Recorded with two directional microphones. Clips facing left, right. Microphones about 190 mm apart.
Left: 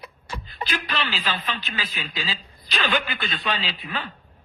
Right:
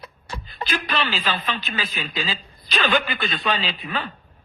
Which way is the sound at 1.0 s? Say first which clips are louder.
Right 3 dB; 45° right (ahead or behind).